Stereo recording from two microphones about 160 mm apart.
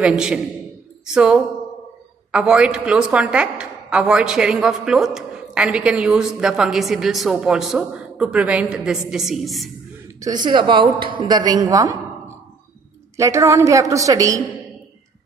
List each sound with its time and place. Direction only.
0.0 s a woman's voice: 5° right (ahead or behind)
10.2 s a woman's voice: 25° right (ahead or behind)
13.1 s a woman's voice: 20° right (ahead or behind)